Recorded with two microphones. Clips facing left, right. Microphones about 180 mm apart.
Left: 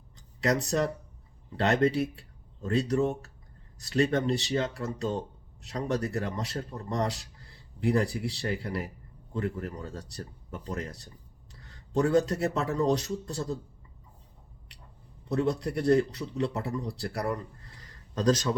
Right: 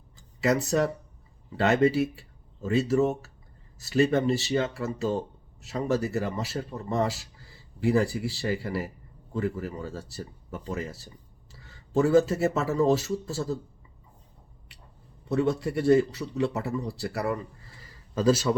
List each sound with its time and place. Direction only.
0.4 s speech: centre (ahead or behind)
15.2 s a man's voice: centre (ahead or behind)